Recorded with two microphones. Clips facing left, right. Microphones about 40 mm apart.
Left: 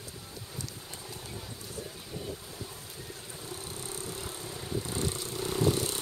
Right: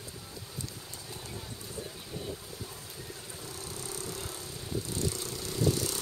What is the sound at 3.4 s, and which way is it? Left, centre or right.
Vehicle, left.